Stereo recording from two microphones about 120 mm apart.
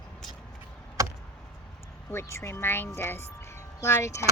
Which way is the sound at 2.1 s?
20° left (ahead or behind).